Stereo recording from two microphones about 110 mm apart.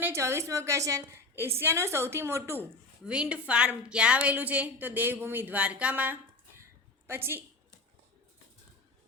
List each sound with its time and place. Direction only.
0.0 s a woman's voice: 25° right (ahead or behind)
3.0 s a woman's voice: 10° right (ahead or behind)